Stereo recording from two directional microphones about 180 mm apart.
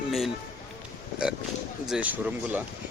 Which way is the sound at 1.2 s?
5° right (ahead or behind).